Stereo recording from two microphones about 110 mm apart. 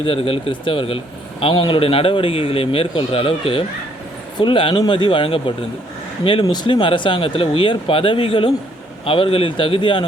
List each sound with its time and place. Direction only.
0.0 s speech: 55° left (ahead or behind)